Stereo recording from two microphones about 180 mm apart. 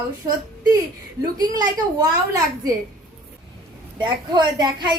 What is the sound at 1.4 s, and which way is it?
Speech, 20° right (ahead or behind).